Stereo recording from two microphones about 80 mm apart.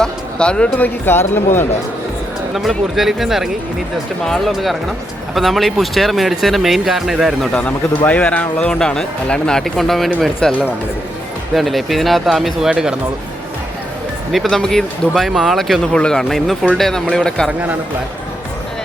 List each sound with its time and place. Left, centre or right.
0.0 s speech: centre
1.0 s speech: left
2.6 s speech: centre
7.5 s a man's voice: centre
14.3 s a man's voice: centre